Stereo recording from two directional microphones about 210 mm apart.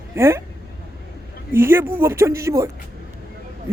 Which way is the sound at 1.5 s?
10° right (ahead or behind).